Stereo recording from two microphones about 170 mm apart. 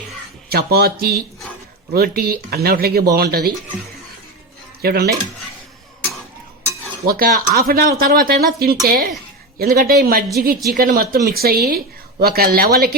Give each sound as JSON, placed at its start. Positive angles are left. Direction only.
{"t": 0.5, "sound": "speech", "side_deg": -65}
{"t": 4.8, "sound": "speech", "side_deg": -65}
{"t": 7.1, "sound": "speech", "side_deg": -60}